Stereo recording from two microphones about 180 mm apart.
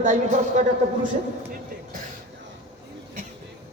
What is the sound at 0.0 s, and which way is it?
Speech, 45° right (ahead or behind).